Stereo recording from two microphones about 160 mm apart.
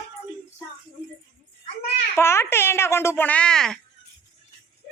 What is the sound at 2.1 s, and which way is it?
Speech, 15° left (ahead or behind).